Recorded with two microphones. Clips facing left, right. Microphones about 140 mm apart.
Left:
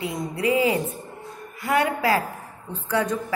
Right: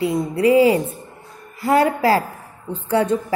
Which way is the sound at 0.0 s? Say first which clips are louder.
Right 8 dB; 30° right (ahead or behind).